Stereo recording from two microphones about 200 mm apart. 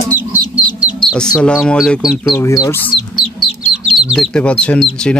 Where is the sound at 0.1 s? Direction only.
10° right (ahead or behind).